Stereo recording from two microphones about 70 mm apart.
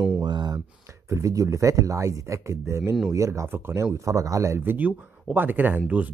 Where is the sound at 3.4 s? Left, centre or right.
Right.